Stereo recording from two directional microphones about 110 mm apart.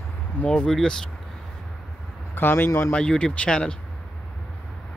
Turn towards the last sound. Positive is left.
turn(degrees=10)  # may be behind; listen again after turning